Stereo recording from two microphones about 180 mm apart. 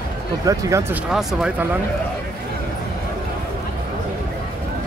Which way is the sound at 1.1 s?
5° right (ahead or behind).